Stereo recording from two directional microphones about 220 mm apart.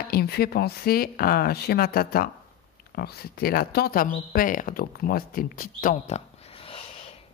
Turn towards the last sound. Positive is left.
turn(degrees=25)  # may be behind; listen again after turning